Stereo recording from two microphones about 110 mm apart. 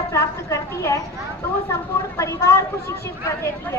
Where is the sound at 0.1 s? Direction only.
25° left (ahead or behind).